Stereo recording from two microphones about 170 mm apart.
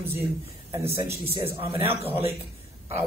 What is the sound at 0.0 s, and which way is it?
A man's voice, 15° right (ahead or behind).